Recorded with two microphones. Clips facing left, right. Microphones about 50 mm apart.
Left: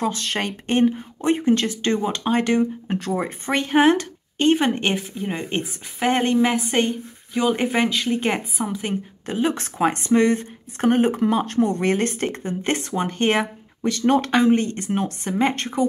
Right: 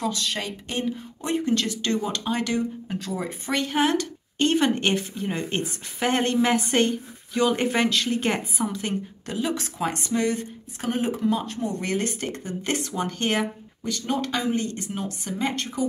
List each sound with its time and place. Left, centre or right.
0.0 s a woman's voice: left
0.3 s a woman's voice: left
11.8 s a woman's voice: left
13.4 s speech: left